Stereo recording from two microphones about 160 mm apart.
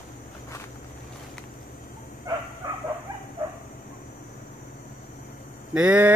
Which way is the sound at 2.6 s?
20° right (ahead or behind).